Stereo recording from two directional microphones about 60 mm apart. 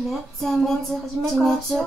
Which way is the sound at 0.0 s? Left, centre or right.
Centre.